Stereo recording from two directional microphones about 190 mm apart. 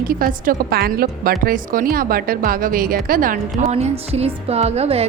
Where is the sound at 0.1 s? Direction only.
45° right (ahead or behind).